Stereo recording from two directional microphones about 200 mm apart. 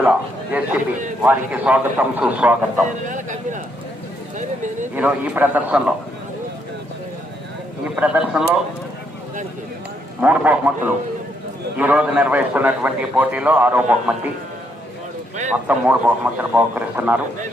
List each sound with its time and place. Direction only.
0.0 s a man's voice: 10° right (ahead or behind)
3.1 s a sound: 40° right (ahead or behind)
4.9 s a man's voice: 5° right (ahead or behind)
7.9 s a man's voice: 5° right (ahead or behind)
10.2 s a man's voice: 5° right (ahead or behind)
15.6 s a man's voice: 10° right (ahead or behind)